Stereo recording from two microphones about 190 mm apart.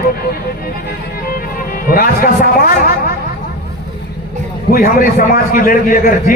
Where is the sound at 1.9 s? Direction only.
50° left (ahead or behind).